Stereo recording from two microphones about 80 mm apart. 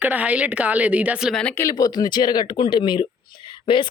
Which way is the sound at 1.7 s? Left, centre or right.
Left.